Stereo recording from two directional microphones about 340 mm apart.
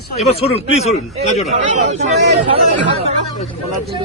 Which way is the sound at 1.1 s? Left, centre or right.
Centre.